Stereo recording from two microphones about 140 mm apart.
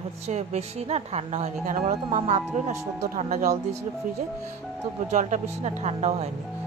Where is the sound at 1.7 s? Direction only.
70° right (ahead or behind).